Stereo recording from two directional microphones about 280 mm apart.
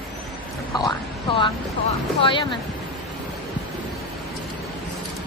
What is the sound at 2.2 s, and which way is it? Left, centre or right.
Speech, centre.